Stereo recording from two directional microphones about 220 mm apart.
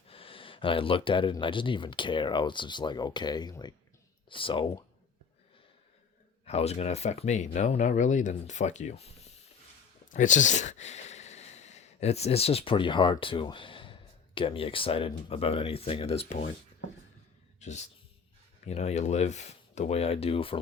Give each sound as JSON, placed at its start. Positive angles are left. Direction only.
{"t": 0.1, "sound": "speech", "side_deg": 25}
{"t": 6.4, "sound": "speech", "side_deg": 30}
{"t": 17.6, "sound": "speech", "side_deg": 30}